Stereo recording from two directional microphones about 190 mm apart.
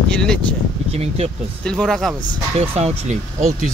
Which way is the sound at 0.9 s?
35° right (ahead or behind).